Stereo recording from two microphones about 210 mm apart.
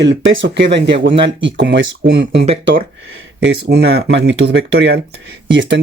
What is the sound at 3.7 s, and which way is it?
Speech, 50° right (ahead or behind).